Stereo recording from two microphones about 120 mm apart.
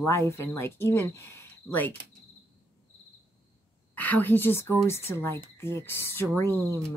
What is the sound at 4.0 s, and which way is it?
Speech, 15° left (ahead or behind).